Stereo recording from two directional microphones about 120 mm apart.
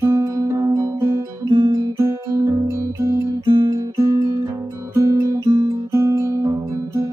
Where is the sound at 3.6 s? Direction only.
30° right (ahead or behind).